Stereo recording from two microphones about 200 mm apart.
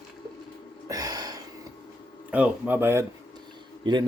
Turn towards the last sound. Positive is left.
turn(degrees=-20)  # may be behind; listen again after turning